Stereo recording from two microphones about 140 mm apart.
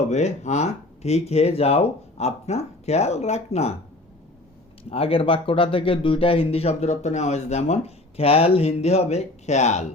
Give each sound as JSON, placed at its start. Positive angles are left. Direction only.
{"t": 0.1, "sound": "speech", "side_deg": 55}
{"t": 4.8, "sound": "speech", "side_deg": 45}